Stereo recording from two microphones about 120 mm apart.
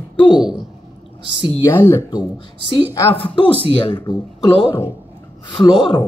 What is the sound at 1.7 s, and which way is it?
Speech, 20° left (ahead or behind).